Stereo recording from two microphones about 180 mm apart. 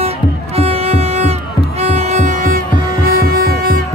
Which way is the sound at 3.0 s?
55° right (ahead or behind).